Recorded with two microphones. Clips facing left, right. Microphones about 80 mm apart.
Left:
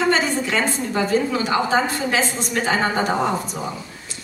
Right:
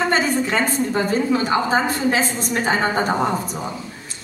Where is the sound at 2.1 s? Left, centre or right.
Right.